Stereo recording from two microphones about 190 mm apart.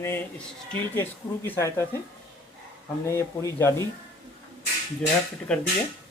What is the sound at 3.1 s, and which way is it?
Speech, 15° left (ahead or behind).